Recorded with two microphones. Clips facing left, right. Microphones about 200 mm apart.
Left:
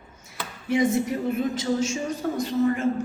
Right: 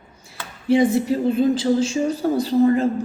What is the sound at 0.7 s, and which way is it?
A woman's voice, 30° right (ahead or behind).